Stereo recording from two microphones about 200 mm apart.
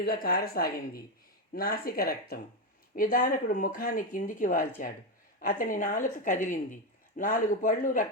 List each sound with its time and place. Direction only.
0.0 s speech: 50° left (ahead or behind)